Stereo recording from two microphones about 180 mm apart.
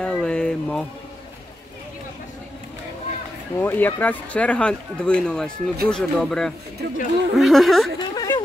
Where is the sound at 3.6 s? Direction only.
10° left (ahead or behind).